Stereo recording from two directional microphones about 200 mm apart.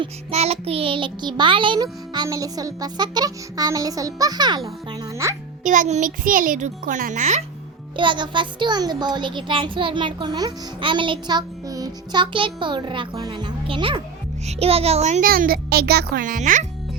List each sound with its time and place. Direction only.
0.0 s a child's voice: 30° right (ahead or behind)
5.6 s a child's voice: 40° right (ahead or behind)
7.9 s a child's voice: 25° right (ahead or behind)